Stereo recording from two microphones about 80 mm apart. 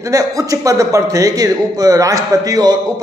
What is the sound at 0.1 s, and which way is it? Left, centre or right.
A man's voice, right.